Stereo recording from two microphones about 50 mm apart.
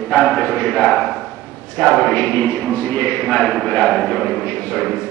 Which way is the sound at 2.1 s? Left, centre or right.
Left.